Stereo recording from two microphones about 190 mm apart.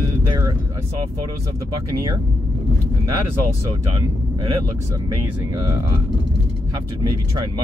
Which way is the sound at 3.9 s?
25° right (ahead or behind).